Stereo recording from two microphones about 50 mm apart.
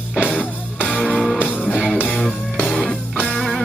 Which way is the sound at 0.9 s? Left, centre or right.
Centre.